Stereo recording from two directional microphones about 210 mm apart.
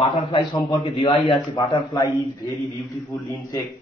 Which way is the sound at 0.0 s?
25° left (ahead or behind).